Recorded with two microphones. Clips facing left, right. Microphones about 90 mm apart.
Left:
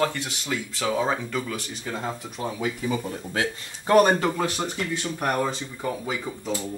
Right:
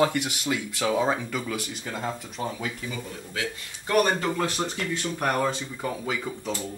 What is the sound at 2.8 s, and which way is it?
Speech, 40° left (ahead or behind).